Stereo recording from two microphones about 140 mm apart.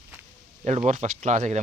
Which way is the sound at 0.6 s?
55° right (ahead or behind).